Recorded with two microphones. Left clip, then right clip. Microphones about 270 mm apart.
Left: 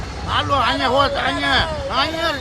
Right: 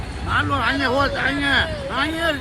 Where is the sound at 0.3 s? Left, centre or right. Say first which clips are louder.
Left 2 dB; left.